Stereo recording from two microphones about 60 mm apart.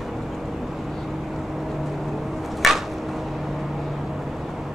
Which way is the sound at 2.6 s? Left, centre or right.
Centre.